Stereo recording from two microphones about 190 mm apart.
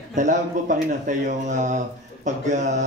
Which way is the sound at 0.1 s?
40° right (ahead or behind).